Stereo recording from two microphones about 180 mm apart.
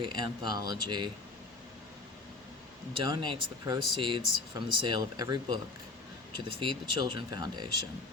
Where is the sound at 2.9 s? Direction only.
25° right (ahead or behind).